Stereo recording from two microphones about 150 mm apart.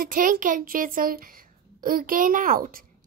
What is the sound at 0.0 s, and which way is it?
Speech, 65° right (ahead or behind).